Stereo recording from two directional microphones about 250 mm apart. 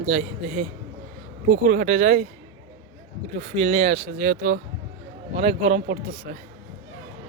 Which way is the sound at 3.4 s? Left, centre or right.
Right.